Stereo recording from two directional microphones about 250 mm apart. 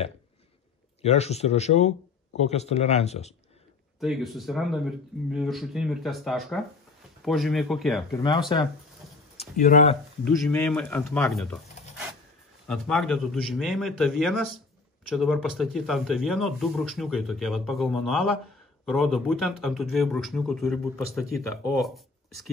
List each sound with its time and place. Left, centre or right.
1.0 s speech: left
4.0 s speech: centre
8.2 s speech: centre
9.4 s speech: left
10.2 s speech: centre
12.6 s speech: centre